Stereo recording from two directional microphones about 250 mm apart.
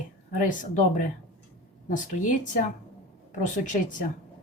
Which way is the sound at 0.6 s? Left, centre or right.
Left.